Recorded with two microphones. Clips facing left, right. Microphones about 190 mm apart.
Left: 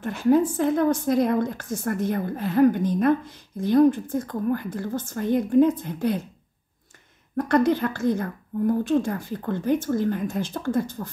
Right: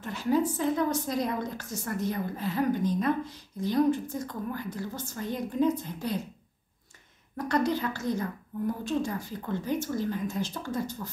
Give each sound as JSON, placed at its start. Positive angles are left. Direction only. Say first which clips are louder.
{"t": 0.0, "sound": "a woman's voice", "louder": "left 7 dB", "side_deg": 55}
{"t": 7.3, "sound": "a woman's voice", "louder": "left 7 dB", "side_deg": 55}